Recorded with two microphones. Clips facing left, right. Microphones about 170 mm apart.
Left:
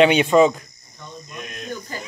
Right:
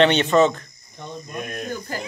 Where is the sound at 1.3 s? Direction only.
50° right (ahead or behind).